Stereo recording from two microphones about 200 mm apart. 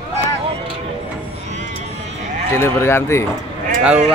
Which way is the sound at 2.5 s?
10° left (ahead or behind).